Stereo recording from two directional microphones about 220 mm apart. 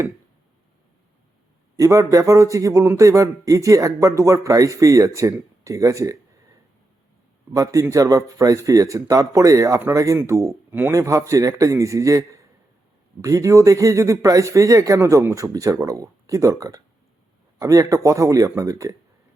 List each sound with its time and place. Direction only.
1.8 s speech: 15° right (ahead or behind)
7.5 s speech: 15° right (ahead or behind)